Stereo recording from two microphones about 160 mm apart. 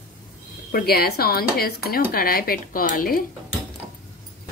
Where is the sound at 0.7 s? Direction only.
75° left (ahead or behind).